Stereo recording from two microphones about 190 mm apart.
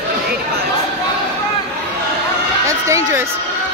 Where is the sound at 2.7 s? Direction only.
15° right (ahead or behind).